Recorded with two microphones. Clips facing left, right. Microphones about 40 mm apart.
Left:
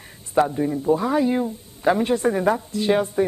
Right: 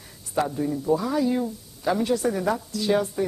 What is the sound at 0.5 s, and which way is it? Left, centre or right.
Speech, left.